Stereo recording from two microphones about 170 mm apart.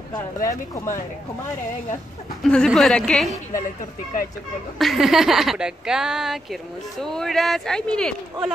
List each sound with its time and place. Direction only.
0.1 s speech: 20° left (ahead or behind)
2.5 s speech: 5° left (ahead or behind)
4.7 s speech: centre (ahead or behind)